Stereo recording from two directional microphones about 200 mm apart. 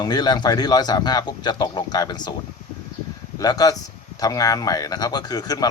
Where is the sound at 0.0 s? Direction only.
20° left (ahead or behind).